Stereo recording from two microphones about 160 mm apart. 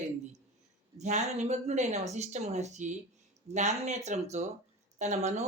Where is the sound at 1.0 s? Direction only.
45° right (ahead or behind).